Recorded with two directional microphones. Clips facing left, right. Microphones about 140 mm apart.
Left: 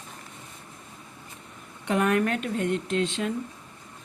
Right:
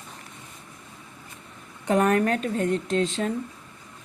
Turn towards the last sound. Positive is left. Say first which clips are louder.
# right 2 dB
turn(degrees=-40)  # may be behind; listen again after turning